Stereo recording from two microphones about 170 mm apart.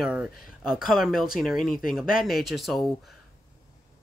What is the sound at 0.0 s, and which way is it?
Speech, 5° right (ahead or behind).